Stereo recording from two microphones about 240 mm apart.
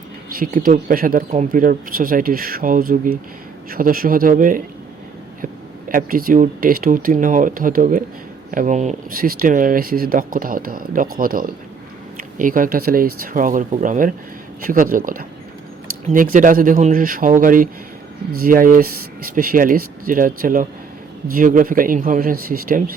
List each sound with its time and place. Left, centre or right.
0.3 s speech: right
5.9 s speech: right